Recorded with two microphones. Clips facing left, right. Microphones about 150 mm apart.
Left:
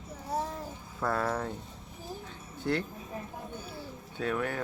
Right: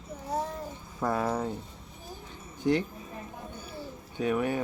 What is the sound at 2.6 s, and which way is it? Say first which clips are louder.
Speech: right 5 dB; 10° right (ahead or behind).